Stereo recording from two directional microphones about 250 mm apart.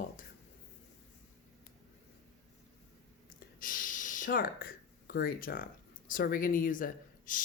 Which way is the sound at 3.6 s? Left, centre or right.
Left.